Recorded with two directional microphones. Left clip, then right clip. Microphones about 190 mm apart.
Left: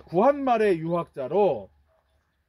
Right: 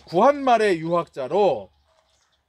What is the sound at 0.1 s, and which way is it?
Speech, 30° right (ahead or behind).